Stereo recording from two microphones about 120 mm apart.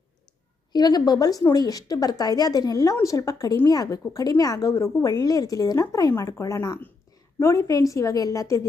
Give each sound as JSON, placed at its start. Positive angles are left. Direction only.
{"t": 0.7, "sound": "a woman's voice", "side_deg": 35}